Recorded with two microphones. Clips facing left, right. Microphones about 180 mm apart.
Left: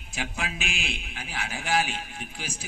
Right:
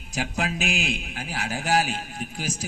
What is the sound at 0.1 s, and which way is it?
Speech, 40° right (ahead or behind).